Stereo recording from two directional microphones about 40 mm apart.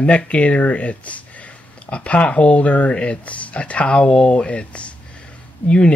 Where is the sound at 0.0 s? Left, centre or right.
Left.